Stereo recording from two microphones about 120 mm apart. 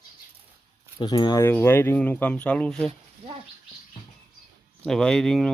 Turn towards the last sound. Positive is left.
turn(degrees=5)  # may be behind; listen again after turning